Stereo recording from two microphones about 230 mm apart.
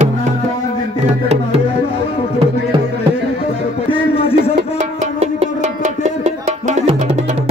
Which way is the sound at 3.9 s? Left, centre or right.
Left.